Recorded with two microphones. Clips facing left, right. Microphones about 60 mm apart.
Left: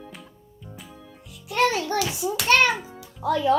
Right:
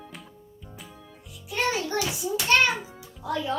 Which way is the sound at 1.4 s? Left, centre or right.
Left.